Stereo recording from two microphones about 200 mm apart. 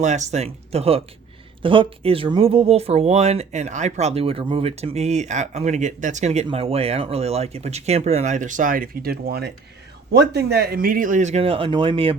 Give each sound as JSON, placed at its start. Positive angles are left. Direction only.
{"t": 0.0, "sound": "speech", "side_deg": -35}